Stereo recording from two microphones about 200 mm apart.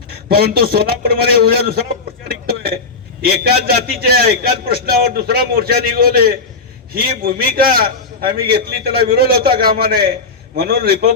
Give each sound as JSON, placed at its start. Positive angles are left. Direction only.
{"t": 0.3, "sound": "a man's voice", "side_deg": -50}
{"t": 2.2, "sound": "a sound", "side_deg": -50}
{"t": 3.2, "sound": "a man's voice", "side_deg": -50}